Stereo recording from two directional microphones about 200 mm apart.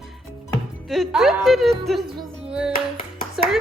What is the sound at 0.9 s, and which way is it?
Speech, centre (ahead or behind).